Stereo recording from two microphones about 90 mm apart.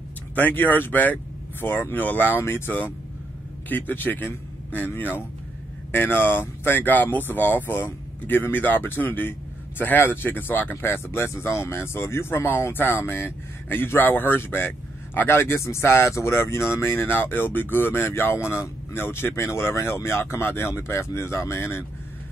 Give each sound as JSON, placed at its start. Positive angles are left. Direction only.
{"t": 0.3, "sound": "a man's voice", "side_deg": 20}